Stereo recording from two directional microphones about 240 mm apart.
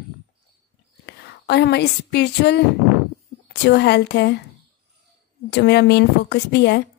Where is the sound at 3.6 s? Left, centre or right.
Left.